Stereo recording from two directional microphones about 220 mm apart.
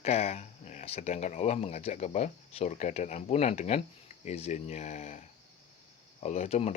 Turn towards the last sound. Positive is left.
turn(degrees=30)  # may be behind; listen again after turning